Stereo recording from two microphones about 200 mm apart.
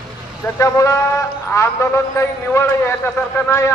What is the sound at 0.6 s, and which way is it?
A man's voice, 15° left (ahead or behind).